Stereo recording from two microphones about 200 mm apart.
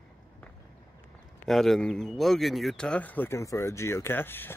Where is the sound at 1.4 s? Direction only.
Centre (ahead or behind).